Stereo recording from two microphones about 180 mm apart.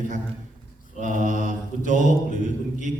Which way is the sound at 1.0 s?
45° right (ahead or behind).